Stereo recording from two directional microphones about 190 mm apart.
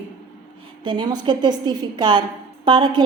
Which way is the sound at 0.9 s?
25° right (ahead or behind).